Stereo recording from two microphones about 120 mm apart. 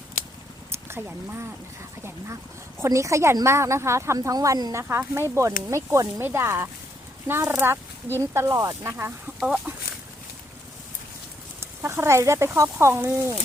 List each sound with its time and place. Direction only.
0.9 s a woman's voice: 15° right (ahead or behind)
9.7 s a sound: 15° right (ahead or behind)
11.6 s a woman's voice: 20° right (ahead or behind)